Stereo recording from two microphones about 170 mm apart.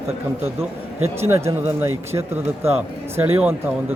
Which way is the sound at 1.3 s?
15° right (ahead or behind).